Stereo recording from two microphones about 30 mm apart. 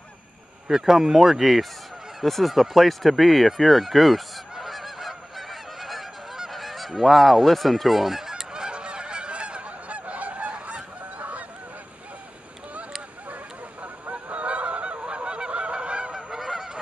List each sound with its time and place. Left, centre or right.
0.7 s speech: centre
2.2 s speech: centre
2.5 s fowl: centre
6.5 s goose: centre
8.3 s goose: right
13.3 s a sound: right
14.3 s goose: right
16.1 s goose: right
16.3 s goose: centre